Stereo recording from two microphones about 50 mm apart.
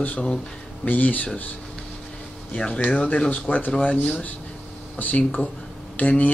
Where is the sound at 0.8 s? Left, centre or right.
Left.